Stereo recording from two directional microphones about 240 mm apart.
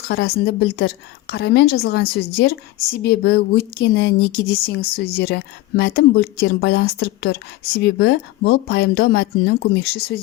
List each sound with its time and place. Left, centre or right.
0.1 s a woman's voice: left